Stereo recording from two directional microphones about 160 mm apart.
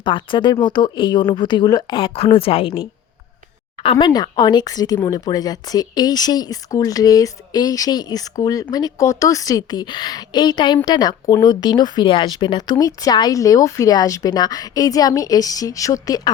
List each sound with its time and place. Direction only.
0.0 s speech: 30° left (ahead or behind)